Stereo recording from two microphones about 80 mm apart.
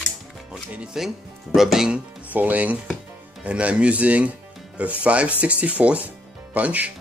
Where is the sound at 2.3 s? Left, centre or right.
Right.